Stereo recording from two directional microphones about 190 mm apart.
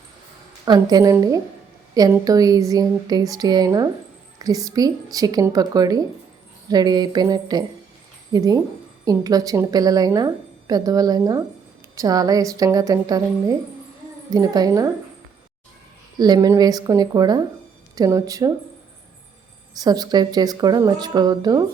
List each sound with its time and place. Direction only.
0.6 s a woman's voice: 20° right (ahead or behind)
16.1 s a woman's voice: 20° right (ahead or behind)
19.8 s a woman's voice: 20° right (ahead or behind)